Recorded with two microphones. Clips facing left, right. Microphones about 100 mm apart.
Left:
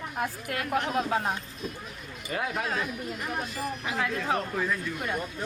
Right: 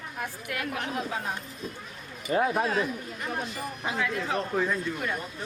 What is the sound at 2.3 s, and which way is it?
Speech, 30° right (ahead or behind).